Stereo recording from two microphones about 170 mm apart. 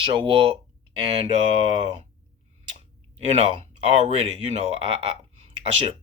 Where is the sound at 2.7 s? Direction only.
40° right (ahead or behind).